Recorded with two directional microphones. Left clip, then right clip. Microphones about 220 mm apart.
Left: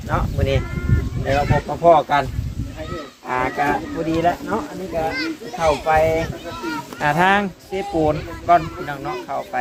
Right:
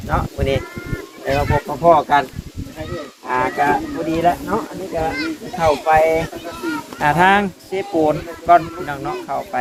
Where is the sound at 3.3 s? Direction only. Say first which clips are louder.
Right 3 dB; centre (ahead or behind).